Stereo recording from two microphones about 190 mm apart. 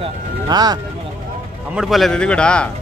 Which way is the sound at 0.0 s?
20° right (ahead or behind).